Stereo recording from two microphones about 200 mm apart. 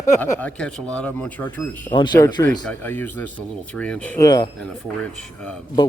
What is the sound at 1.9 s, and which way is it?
Speech, 20° left (ahead or behind).